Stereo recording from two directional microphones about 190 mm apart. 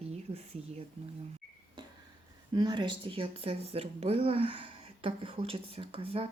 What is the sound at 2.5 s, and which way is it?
Speech, 25° right (ahead or behind).